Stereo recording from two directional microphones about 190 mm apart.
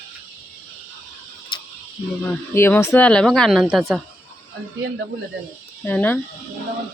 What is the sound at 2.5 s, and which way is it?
Speech, 15° left (ahead or behind).